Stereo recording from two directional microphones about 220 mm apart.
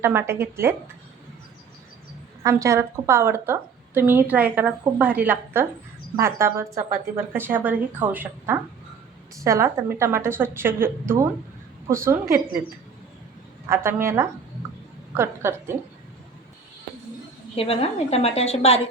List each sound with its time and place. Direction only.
0.0 s a woman's voice: 10° right (ahead or behind)
2.4 s a woman's voice: 15° right (ahead or behind)
13.7 s a woman's voice: 10° right (ahead or behind)
17.5 s a woman's voice: 25° left (ahead or behind)